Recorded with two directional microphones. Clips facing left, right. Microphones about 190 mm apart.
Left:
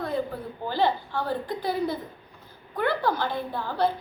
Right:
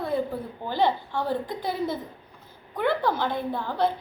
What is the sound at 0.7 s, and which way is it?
A woman's voice, 20° right (ahead or behind).